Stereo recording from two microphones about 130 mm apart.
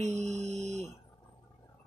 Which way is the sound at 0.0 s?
60° right (ahead or behind).